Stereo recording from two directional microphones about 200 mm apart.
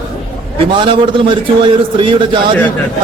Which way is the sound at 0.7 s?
25° right (ahead or behind).